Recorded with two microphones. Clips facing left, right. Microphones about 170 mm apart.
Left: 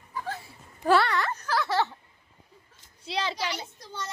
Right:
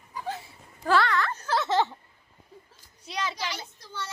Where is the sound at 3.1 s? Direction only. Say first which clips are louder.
Left 2 dB; 30° left (ahead or behind).